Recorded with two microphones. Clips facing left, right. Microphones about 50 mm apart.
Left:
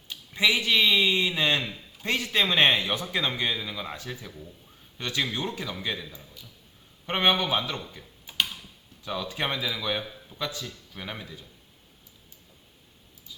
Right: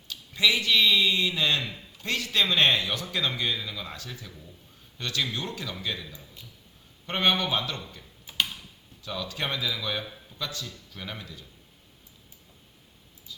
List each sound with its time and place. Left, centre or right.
0.1 s a man's voice: left
9.0 s a man's voice: left